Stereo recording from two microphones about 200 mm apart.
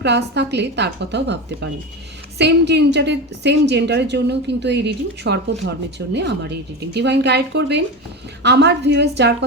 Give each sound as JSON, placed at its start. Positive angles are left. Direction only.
{"t": 0.0, "sound": "a woman's voice", "side_deg": -60}